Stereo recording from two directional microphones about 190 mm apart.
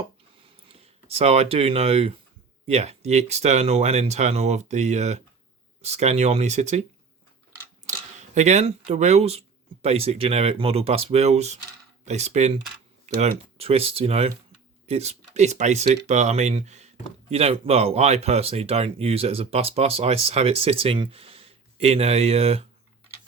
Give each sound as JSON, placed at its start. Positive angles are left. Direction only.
{"t": 0.7, "sound": "speech", "side_deg": -30}
{"t": 8.4, "sound": "speech", "side_deg": -35}